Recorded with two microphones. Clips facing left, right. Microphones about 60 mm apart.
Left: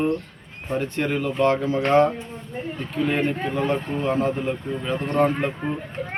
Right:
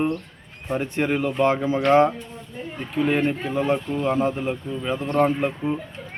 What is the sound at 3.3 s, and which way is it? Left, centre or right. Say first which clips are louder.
Speech: right 1 dB; left.